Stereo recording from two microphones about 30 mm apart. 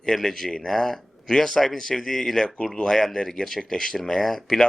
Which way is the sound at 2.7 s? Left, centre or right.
Centre.